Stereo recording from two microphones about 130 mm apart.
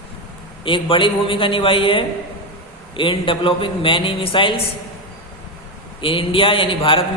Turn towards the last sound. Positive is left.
turn(degrees=40)  # may be behind; listen again after turning